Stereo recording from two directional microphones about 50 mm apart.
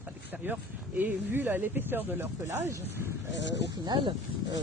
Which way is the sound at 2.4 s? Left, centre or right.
Right.